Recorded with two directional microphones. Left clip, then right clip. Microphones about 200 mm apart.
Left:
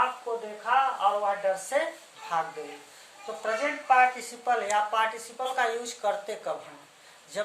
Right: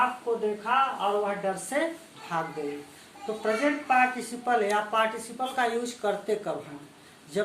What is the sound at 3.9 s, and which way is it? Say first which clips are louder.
Speech: left 4 dB; 20° left (ahead or behind).